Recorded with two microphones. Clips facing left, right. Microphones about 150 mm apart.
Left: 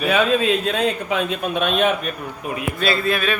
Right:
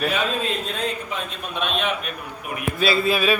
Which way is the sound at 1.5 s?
50° left (ahead or behind).